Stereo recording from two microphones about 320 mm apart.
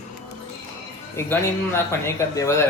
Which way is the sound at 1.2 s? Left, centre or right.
Centre.